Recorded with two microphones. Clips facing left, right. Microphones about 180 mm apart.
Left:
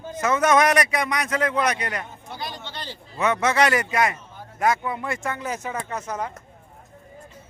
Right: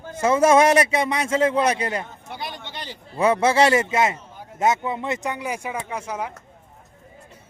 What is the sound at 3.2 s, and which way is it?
A man's voice, 30° right (ahead or behind).